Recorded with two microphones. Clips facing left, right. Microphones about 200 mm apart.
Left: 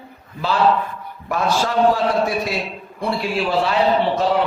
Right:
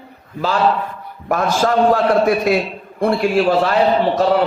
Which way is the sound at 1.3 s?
50° right (ahead or behind).